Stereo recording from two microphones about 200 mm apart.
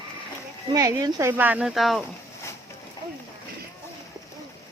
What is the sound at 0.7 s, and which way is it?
Speech, 15° right (ahead or behind).